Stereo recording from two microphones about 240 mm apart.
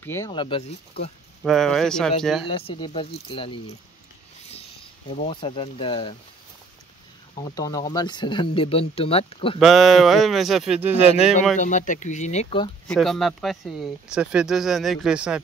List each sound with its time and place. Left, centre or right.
0.0 s speech: centre
1.4 s speech: centre
2.4 s speech: left
5.3 s speech: left
7.3 s speech: centre
9.6 s speech: centre
11.5 s speech: left
12.8 s speech: centre